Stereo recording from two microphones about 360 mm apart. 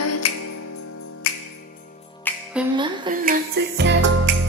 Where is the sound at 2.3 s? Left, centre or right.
Centre.